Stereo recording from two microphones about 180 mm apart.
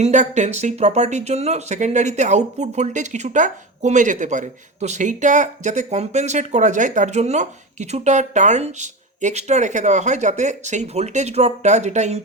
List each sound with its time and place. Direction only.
0.0 s speech: 40° right (ahead or behind)